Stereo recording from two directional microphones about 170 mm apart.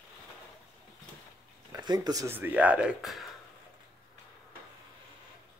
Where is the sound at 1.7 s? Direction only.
25° right (ahead or behind); by 3.3 s centre (ahead or behind).